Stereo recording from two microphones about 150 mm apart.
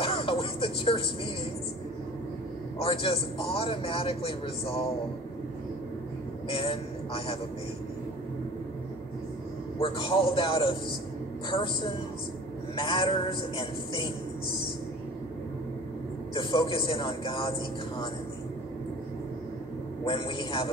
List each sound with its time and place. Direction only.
0.0 s music: 35° left (ahead or behind)
2.8 s a man's voice: 35° left (ahead or behind)
6.5 s a man's voice: 35° left (ahead or behind)
9.8 s a man's voice: 35° left (ahead or behind)
16.3 s a man's voice: 35° left (ahead or behind)
20.1 s a man's voice: 35° left (ahead or behind)